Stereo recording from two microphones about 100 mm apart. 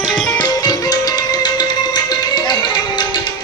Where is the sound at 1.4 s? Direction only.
45° left (ahead or behind).